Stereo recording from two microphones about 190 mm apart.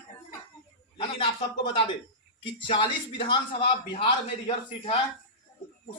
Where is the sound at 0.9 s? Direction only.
30° left (ahead or behind).